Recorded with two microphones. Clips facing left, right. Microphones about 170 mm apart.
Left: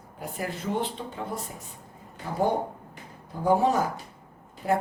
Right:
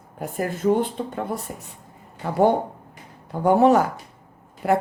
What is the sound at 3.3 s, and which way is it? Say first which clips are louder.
Speech: right 7 dB; 70° right (ahead or behind).